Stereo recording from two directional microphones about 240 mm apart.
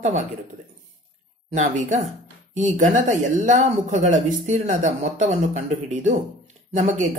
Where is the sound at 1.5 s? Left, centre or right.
Right.